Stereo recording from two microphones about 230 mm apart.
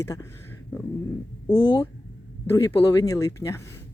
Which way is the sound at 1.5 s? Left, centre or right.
Centre.